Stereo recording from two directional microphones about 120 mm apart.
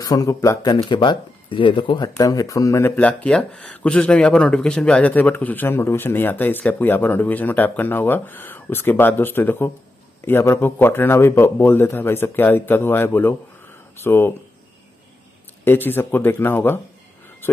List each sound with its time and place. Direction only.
0.0 s speech: 30° left (ahead or behind)
3.0 s speech: 10° left (ahead or behind)
15.6 s speech: 15° left (ahead or behind)